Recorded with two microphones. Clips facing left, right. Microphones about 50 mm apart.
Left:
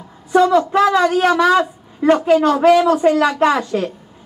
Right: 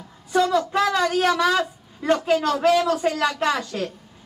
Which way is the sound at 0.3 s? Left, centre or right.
Left.